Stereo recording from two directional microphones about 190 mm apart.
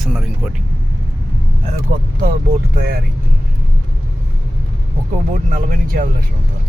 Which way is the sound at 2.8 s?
55° right (ahead or behind).